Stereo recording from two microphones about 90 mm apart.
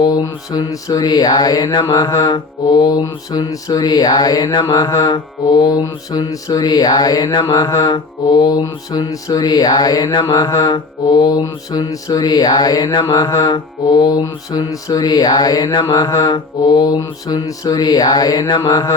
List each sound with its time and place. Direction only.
0.0 s music: 50° left (ahead or behind)